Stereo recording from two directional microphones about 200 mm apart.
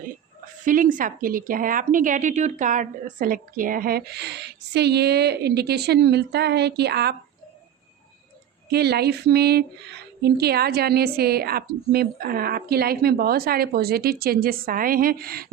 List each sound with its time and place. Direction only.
0.6 s speech: 40° right (ahead or behind)
8.7 s speech: 55° right (ahead or behind)